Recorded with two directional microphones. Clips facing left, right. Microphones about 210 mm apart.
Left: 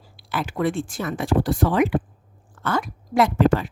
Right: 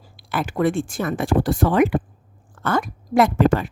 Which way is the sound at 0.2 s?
50° right (ahead or behind).